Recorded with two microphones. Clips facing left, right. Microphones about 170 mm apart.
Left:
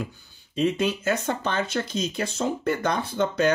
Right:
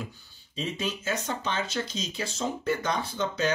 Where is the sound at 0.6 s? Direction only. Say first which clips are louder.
Left 9 dB; 60° left (ahead or behind).